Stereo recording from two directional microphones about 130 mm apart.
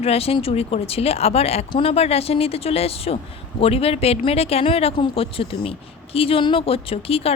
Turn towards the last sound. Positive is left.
turn(degrees=50)  # may be behind; listen again after turning